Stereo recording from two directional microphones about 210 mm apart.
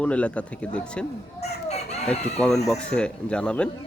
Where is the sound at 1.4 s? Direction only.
30° left (ahead or behind).